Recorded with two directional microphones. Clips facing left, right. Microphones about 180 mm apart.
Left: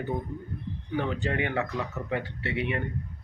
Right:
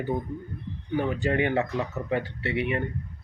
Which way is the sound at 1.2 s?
40° right (ahead or behind).